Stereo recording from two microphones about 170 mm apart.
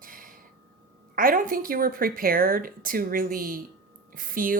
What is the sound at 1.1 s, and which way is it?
Speech, 55° right (ahead or behind).